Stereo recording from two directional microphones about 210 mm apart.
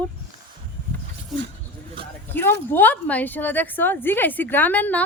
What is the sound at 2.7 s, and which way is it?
A woman's voice, 10° left (ahead or behind).